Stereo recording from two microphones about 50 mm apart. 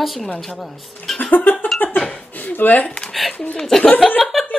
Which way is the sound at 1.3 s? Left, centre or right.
Left.